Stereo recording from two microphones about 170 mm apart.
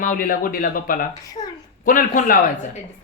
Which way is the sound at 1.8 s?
50° left (ahead or behind).